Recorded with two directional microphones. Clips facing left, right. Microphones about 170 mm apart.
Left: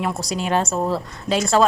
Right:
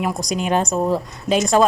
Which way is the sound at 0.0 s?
15° right (ahead or behind).